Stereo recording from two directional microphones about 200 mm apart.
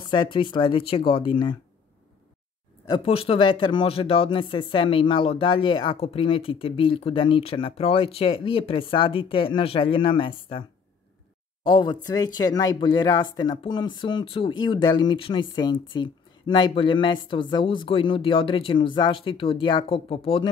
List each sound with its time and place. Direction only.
0.1 s speech: 25° left (ahead or behind)
2.9 s speech: 30° left (ahead or behind)
11.6 s speech: 25° left (ahead or behind)